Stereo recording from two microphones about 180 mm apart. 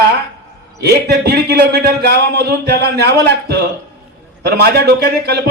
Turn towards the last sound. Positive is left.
turn(degrees=-65)  # may be behind; listen again after turning